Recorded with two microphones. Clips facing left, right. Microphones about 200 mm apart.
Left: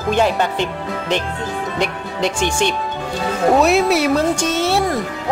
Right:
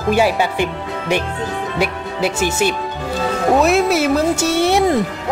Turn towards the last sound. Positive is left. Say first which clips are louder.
# right 3 dB
turn(degrees=-15)  # may be behind; listen again after turning